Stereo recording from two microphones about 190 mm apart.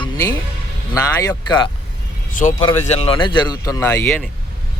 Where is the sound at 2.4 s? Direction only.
40° left (ahead or behind); by 3.8 s 20° left (ahead or behind).